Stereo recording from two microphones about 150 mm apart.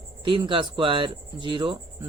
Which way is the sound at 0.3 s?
35° right (ahead or behind).